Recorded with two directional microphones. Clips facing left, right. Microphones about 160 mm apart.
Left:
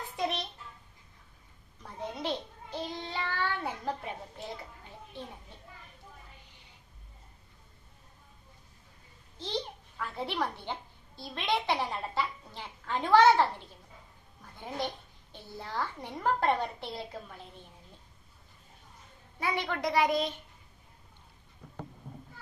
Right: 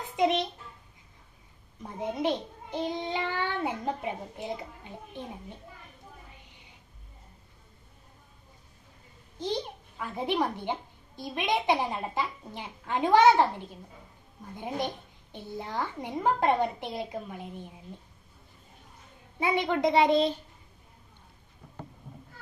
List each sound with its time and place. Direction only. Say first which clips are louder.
0.2 s a sound: right 8 dB; 20° right (ahead or behind)
1.8 s a child's voice: right 7 dB; 20° right (ahead or behind)
9.4 s a child's voice: right 4 dB; 15° right (ahead or behind)
14.5 s speech: right 3 dB; 15° right (ahead or behind)
19.4 s a woman's voice: right 6 dB; 20° right (ahead or behind)